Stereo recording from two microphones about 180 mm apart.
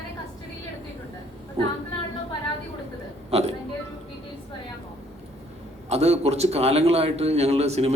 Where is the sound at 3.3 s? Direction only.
35° right (ahead or behind).